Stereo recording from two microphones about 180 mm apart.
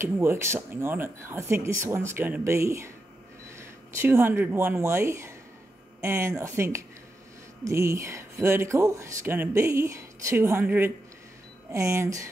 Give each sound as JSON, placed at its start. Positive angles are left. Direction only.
{"t": 0.0, "sound": "speech", "side_deg": -15}